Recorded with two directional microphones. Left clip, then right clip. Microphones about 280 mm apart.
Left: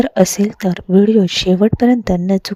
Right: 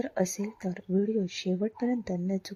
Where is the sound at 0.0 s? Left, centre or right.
Left.